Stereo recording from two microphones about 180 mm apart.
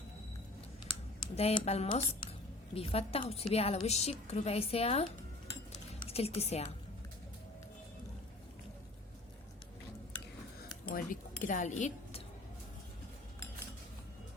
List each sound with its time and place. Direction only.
1.2 s speech: 30° left (ahead or behind)
5.7 s a sound: 35° left (ahead or behind)
10.8 s chink: 50° left (ahead or behind)